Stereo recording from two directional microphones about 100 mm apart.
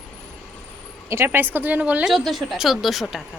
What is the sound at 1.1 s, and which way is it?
Speech, 25° right (ahead or behind).